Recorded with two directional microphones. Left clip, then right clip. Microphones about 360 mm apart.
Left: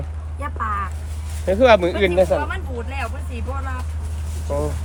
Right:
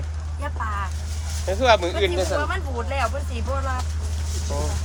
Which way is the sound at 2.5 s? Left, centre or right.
Centre.